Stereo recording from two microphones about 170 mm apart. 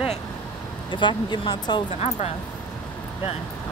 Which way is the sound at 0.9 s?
25° left (ahead or behind).